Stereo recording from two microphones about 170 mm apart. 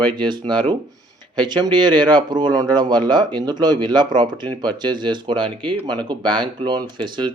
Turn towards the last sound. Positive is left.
turn(degrees=-25)  # may be behind; listen again after turning